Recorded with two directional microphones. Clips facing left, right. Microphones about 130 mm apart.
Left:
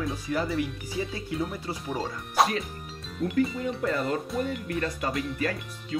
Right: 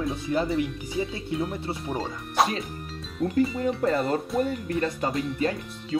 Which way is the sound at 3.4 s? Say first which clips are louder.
Right 3 dB; 30° right (ahead or behind).